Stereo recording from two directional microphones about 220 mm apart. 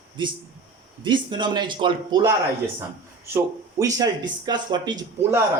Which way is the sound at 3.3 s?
15° right (ahead or behind).